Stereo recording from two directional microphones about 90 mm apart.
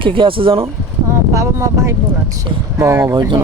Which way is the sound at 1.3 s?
35° right (ahead or behind).